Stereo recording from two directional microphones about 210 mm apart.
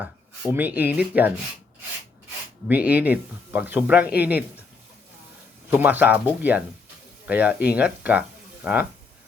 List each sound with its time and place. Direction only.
0.5 s speech: 10° right (ahead or behind)
2.6 s speech: 5° right (ahead or behind)
5.7 s speech: 10° right (ahead or behind)